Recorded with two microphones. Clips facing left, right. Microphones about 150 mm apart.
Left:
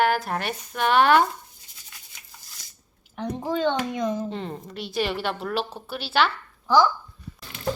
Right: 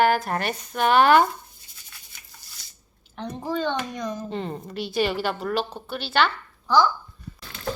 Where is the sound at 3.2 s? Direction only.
15° left (ahead or behind).